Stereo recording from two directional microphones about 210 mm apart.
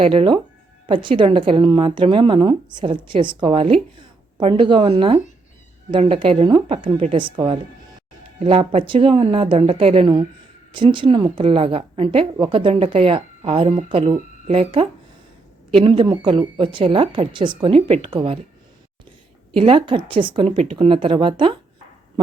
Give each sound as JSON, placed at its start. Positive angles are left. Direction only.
{"t": 0.0, "sound": "a woman's voice", "side_deg": -25}
{"t": 19.5, "sound": "a woman's voice", "side_deg": -25}